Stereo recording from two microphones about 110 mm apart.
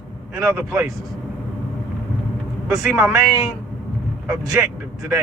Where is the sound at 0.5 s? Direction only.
20° right (ahead or behind).